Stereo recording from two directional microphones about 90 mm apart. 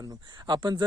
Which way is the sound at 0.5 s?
65° right (ahead or behind).